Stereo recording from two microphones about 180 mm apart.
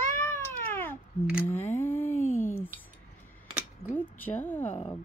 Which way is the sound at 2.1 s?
45° left (ahead or behind).